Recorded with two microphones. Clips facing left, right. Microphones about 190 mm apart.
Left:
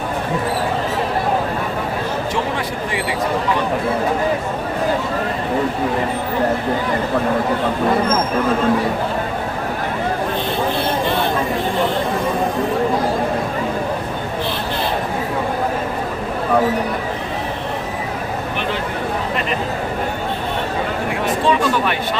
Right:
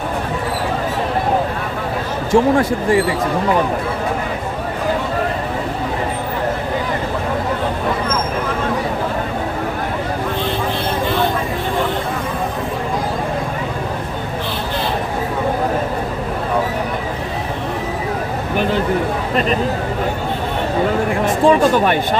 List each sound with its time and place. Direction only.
2.3 s speech: 45° right (ahead or behind)
21.4 s speech: 45° right (ahead or behind)